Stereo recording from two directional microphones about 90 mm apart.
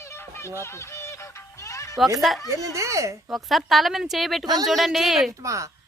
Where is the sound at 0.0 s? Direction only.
30° left (ahead or behind).